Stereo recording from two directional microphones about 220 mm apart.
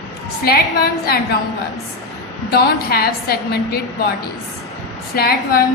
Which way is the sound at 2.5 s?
45° left (ahead or behind).